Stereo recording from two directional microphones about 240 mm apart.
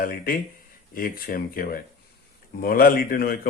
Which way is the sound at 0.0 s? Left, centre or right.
Left.